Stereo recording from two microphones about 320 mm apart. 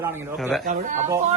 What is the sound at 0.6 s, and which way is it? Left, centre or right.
Speech, right.